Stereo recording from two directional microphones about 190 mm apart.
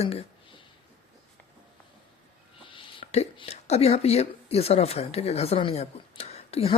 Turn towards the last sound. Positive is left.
turn(degrees=30)  # may be behind; listen again after turning